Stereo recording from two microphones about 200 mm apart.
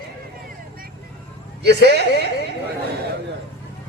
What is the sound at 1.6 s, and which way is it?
Speech, 55° right (ahead or behind).